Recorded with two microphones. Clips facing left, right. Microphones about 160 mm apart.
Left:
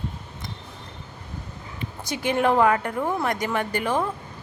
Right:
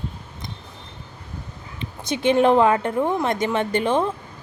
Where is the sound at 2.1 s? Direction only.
20° right (ahead or behind).